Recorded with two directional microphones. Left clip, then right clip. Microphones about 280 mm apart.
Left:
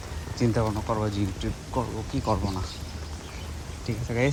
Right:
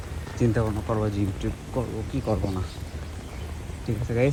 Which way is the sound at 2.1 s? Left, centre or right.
Left.